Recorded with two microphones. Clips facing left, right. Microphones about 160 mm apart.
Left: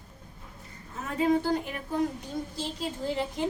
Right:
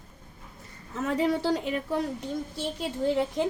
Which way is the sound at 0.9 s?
80° right.